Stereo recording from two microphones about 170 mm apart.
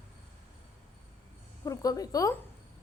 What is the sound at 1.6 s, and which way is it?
Speech, 20° left (ahead or behind).